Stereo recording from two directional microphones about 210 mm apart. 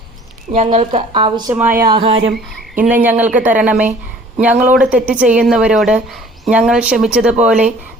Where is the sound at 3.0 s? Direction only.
5° right (ahead or behind).